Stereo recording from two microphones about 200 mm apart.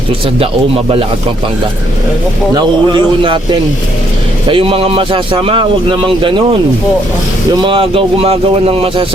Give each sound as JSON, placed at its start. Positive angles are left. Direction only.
{"t": 2.6, "sound": "speech", "side_deg": -25}